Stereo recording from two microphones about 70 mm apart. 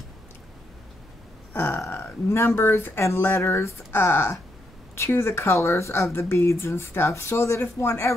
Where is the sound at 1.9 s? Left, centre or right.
Left.